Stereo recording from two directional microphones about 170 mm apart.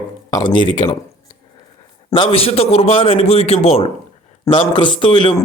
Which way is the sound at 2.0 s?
30° left (ahead or behind).